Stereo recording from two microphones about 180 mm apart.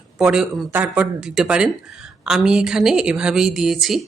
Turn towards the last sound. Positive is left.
turn(degrees=0)  # may be behind; listen again after turning